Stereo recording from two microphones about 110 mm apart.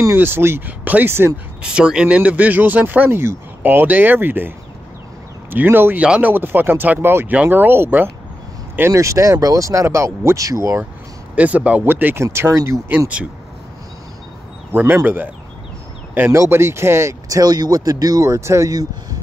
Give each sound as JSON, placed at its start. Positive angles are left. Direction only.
{"t": 0.0, "sound": "speech", "side_deg": -20}
{"t": 1.6, "sound": "speech", "side_deg": -10}
{"t": 11.3, "sound": "speech", "side_deg": -15}
{"t": 14.7, "sound": "speech", "side_deg": -20}